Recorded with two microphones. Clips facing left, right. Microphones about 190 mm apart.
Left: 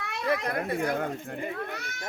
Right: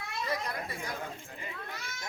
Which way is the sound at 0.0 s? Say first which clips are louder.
Left 6 dB; 65° left (ahead or behind).